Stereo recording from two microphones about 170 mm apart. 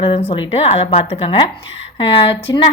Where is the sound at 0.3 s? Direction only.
35° left (ahead or behind).